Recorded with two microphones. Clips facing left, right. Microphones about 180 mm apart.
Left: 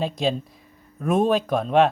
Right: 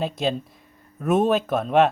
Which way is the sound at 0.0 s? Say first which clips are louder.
Left 1 dB; centre (ahead or behind).